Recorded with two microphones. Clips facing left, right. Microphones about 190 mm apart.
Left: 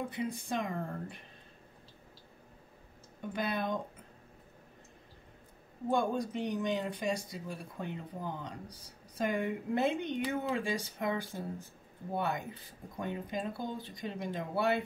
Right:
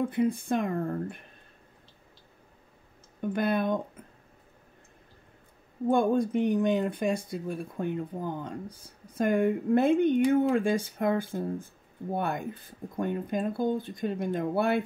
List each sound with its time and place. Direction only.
0.1 s speech: 55° right (ahead or behind)
3.2 s speech: 55° right (ahead or behind)
5.9 s speech: 55° right (ahead or behind)